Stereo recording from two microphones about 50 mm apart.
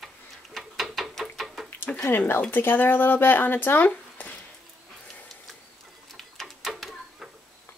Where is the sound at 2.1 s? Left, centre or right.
Left.